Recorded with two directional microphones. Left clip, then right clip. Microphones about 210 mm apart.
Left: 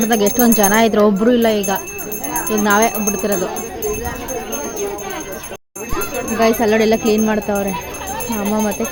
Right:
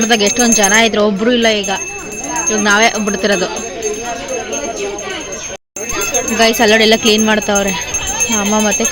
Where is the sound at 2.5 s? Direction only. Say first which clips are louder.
Right 4 dB; 10° left (ahead or behind).